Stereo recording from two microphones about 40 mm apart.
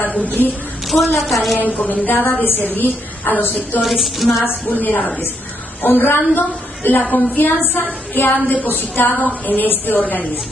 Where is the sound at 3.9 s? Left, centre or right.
Centre.